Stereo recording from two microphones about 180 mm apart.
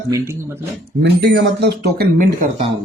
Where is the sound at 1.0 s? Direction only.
65° right (ahead or behind).